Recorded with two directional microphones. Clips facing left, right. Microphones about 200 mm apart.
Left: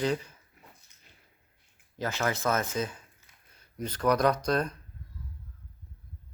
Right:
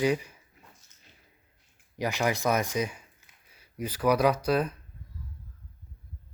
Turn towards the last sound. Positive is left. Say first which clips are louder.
# right 2 dB
turn(degrees=-5)  # may be behind; listen again after turning